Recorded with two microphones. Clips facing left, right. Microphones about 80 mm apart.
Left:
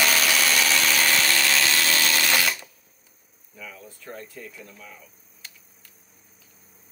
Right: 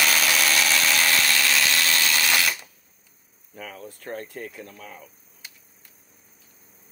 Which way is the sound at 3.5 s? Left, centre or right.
Right.